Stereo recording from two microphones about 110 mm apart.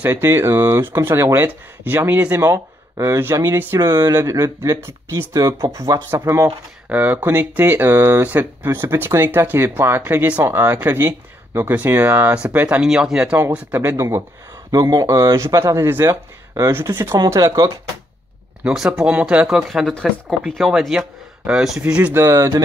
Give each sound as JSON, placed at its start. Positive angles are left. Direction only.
{"t": 0.0, "sound": "speech", "side_deg": -20}
{"t": 18.6, "sound": "speech", "side_deg": -10}
{"t": 22.1, "sound": "speech", "side_deg": -25}